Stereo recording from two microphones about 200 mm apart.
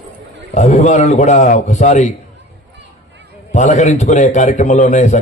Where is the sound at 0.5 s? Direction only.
35° left (ahead or behind).